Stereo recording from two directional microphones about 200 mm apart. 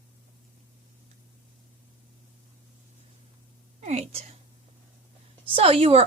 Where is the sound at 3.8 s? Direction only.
35° right (ahead or behind).